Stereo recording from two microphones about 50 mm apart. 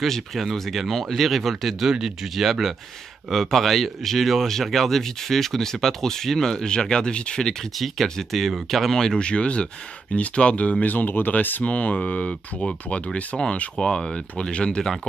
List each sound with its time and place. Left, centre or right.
0.0 s speech: centre
7.7 s speech: centre; by 11.6 s left
11.6 s speech: left